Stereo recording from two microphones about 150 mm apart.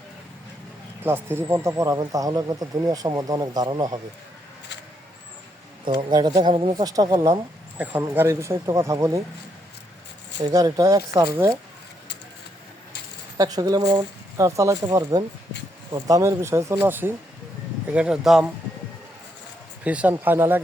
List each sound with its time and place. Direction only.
1.0 s speech: 15° right (ahead or behind)
5.8 s speech: 30° right (ahead or behind)
6.8 s speech: 25° right (ahead or behind)
10.4 s speech: 25° right (ahead or behind)
13.3 s speech: 25° right (ahead or behind); by 18.5 s centre (ahead or behind)
19.8 s speech: 10° right (ahead or behind)